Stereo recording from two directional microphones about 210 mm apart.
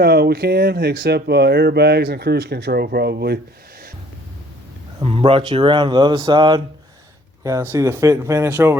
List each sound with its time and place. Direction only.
0.0 s speech: 50° right (ahead or behind)
4.9 s speech: 25° right (ahead or behind); by 8.8 s 10° right (ahead or behind)